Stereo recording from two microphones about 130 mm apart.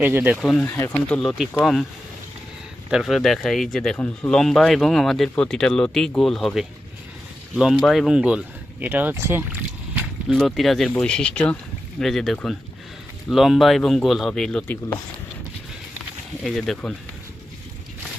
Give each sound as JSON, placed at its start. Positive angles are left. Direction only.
{"t": 0.0, "sound": "speech", "side_deg": -15}
{"t": 0.6, "sound": "speech", "side_deg": 20}
{"t": 1.4, "sound": "speech", "side_deg": 0}
{"t": 2.9, "sound": "speech", "side_deg": 0}
{"t": 10.2, "sound": "speech", "side_deg": 0}
{"t": 16.4, "sound": "speech", "side_deg": 0}